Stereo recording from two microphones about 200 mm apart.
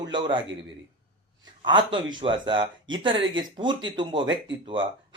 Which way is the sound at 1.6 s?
25° right (ahead or behind).